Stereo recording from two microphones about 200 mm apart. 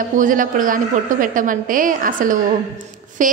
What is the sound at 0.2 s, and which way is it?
A woman's voice, 40° right (ahead or behind).